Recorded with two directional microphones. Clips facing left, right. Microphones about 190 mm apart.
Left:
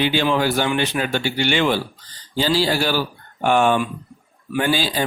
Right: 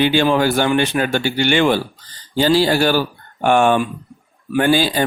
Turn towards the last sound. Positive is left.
turn(degrees=-55)  # may be behind; listen again after turning